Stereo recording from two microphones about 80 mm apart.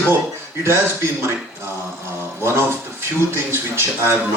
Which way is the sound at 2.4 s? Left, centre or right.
Right.